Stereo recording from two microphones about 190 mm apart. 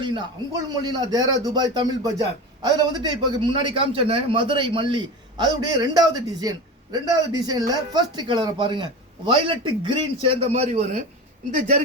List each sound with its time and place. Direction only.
0.0 s a man's voice: 20° right (ahead or behind)